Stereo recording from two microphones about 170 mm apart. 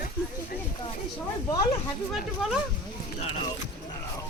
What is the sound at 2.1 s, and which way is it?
Speech, centre (ahead or behind).